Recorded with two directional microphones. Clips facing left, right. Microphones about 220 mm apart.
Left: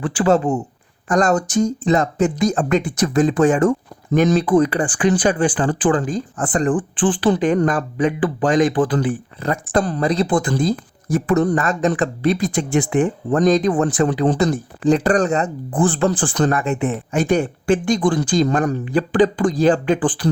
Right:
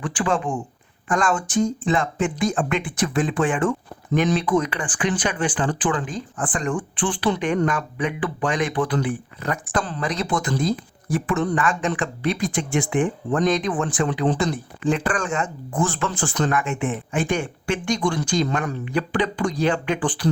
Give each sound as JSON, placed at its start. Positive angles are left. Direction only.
{"t": 0.0, "sound": "speech", "side_deg": 40}